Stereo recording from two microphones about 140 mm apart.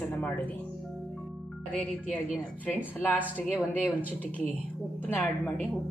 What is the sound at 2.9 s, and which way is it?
Speech, 10° left (ahead or behind).